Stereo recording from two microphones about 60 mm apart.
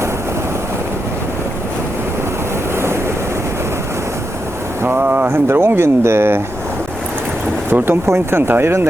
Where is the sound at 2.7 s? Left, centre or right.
Right.